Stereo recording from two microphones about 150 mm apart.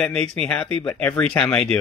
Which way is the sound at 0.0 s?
5° left (ahead or behind).